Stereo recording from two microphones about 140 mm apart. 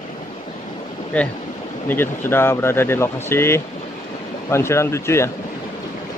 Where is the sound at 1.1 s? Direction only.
10° left (ahead or behind).